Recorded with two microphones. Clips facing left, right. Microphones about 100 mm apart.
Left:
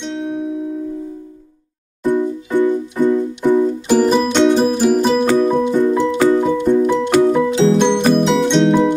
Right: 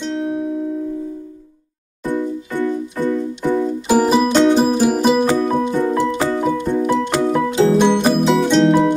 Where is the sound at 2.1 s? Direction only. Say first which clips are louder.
Left 4 dB; 15° left (ahead or behind).